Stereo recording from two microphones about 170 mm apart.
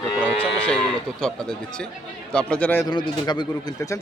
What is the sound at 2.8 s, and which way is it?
Speech, 25° left (ahead or behind).